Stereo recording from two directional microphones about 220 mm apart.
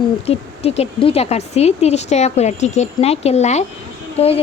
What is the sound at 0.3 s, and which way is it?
Speech, 25° left (ahead or behind).